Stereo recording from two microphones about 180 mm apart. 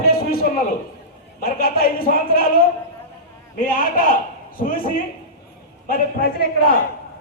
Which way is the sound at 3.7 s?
50° left (ahead or behind).